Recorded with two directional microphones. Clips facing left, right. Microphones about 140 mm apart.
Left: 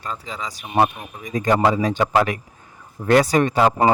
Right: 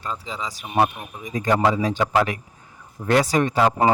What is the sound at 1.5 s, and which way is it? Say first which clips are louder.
A man's voice: left 1 dB; 50° left (ahead or behind).